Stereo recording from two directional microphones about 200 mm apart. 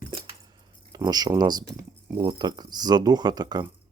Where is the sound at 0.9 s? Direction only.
20° right (ahead or behind).